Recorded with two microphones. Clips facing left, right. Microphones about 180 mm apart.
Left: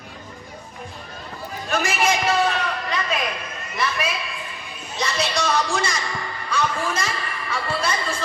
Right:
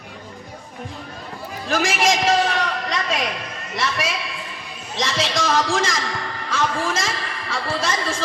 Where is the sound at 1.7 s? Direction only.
90° right.